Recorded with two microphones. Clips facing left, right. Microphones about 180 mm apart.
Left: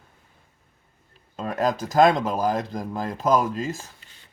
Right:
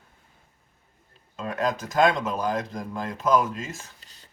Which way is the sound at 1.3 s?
35° left (ahead or behind).